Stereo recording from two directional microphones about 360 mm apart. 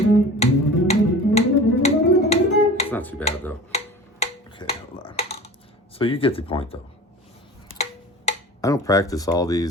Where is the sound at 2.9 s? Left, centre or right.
Centre.